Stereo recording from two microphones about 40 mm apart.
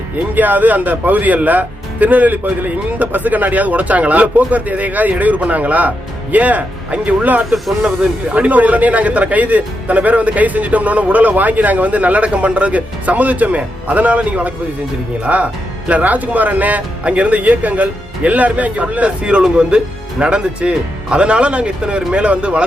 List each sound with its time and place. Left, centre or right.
0.3 s speech: right